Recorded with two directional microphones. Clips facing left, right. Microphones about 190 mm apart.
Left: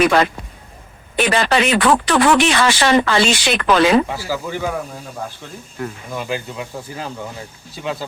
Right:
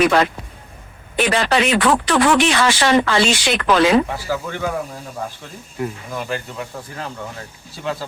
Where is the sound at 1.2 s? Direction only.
60° left (ahead or behind).